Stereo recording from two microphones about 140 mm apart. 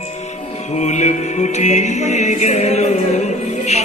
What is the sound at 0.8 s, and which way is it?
Music, 55° left (ahead or behind).